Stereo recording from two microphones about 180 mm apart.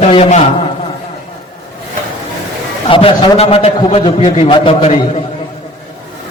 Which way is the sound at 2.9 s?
30° left (ahead or behind).